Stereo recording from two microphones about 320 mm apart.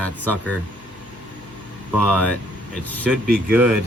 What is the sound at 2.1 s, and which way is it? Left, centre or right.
Speech, centre.